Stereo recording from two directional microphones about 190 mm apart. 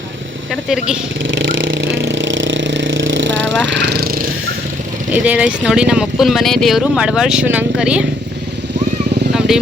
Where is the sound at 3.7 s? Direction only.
60° right (ahead or behind).